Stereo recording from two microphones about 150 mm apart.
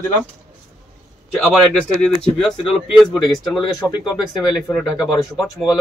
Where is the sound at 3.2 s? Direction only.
Centre (ahead or behind).